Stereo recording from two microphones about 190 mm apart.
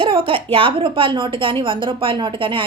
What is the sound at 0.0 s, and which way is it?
A woman's voice, 25° right (ahead or behind).